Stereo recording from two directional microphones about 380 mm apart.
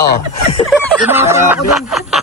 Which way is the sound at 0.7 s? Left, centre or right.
Centre.